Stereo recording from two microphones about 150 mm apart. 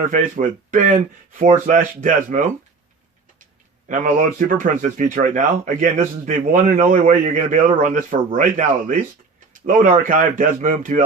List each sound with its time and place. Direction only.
0.1 s a man's voice: 60° right (ahead or behind)
3.8 s a man's voice: 60° right (ahead or behind)
9.5 s a man's voice: 65° right (ahead or behind)